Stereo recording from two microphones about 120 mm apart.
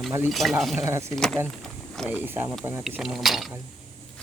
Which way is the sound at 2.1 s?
15° right (ahead or behind).